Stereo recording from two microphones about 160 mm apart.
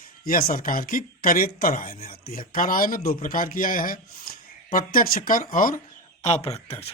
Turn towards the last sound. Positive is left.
turn(degrees=40)  # may be behind; listen again after turning